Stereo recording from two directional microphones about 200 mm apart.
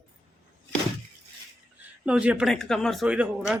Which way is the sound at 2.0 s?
5° right (ahead or behind).